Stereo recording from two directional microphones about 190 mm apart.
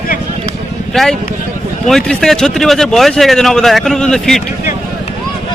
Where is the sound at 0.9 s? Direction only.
Centre (ahead or behind).